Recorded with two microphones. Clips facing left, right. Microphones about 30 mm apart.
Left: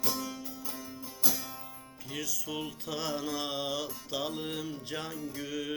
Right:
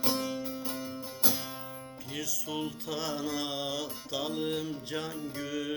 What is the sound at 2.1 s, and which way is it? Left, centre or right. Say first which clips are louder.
Music: even; centre.